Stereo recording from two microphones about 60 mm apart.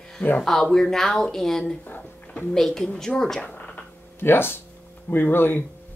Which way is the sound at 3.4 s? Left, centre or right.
Left.